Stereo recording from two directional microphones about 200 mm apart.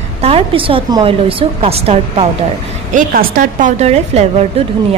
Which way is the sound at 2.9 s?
45° right (ahead or behind).